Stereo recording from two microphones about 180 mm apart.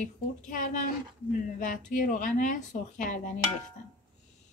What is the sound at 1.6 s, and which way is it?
A woman's voice, 45° left (ahead or behind).